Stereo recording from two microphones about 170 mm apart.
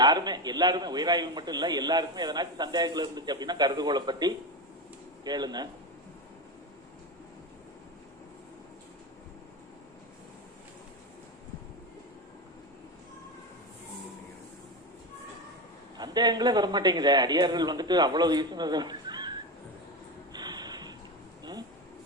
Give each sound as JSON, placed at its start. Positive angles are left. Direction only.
{"t": 0.0, "sound": "a man's voice", "side_deg": -25}
{"t": 16.0, "sound": "a man's voice", "side_deg": -25}
{"t": 20.3, "sound": "a sound", "side_deg": -25}